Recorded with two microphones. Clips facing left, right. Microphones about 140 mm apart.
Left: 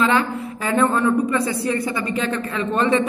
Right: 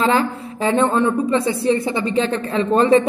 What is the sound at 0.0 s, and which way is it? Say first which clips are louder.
A woman's voice: right 1 dB; 30° right (ahead or behind).